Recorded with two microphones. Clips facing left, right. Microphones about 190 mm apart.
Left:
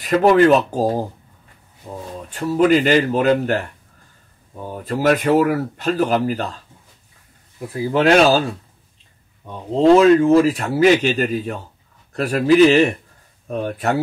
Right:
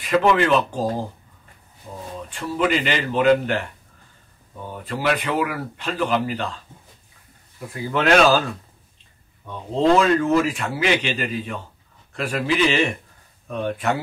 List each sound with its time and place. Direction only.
0.0 s speech: 40° left (ahead or behind)
2.2 s speech: 40° left (ahead or behind)
4.6 s speech: 40° left (ahead or behind)
7.7 s speech: 30° left (ahead or behind)
9.5 s speech: 25° left (ahead or behind)